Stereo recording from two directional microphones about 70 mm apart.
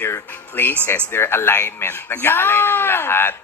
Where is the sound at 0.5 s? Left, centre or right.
Left.